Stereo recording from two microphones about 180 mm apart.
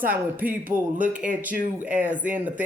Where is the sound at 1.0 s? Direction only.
45° right (ahead or behind).